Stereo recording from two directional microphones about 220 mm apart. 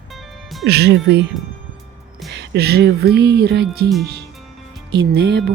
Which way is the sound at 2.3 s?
50° right (ahead or behind).